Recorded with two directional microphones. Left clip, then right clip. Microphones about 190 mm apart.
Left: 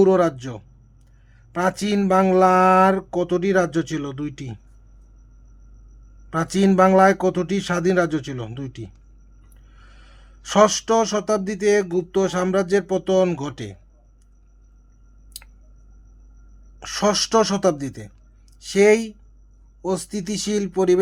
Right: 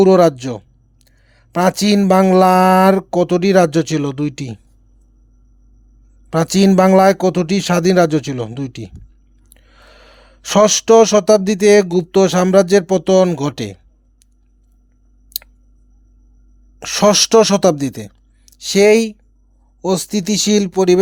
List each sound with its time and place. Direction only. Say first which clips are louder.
0.0 s a man's voice: right 7 dB; 40° right (ahead or behind)
6.3 s speech: right 6 dB; 40° right (ahead or behind)
15.3 s clicking: right 13 dB; 40° right (ahead or behind)
16.8 s speech: right 8 dB; 40° right (ahead or behind)